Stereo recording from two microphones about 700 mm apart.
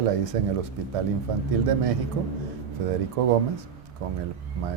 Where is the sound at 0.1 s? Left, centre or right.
Right.